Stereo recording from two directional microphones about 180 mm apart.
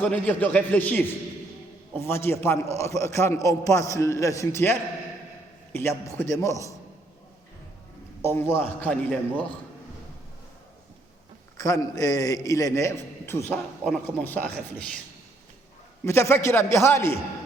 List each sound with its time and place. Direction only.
0.0 s a man's voice: 5° left (ahead or behind)
8.2 s a man's voice: 10° left (ahead or behind)
11.5 s a man's voice: 20° left (ahead or behind)
13.8 s a man's voice: centre (ahead or behind)
16.0 s a man's voice: 15° left (ahead or behind)